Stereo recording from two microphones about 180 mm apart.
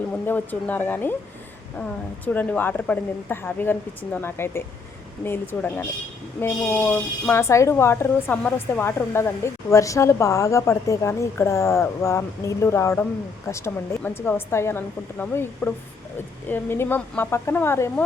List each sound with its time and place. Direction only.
0.3 s speech: 10° left (ahead or behind)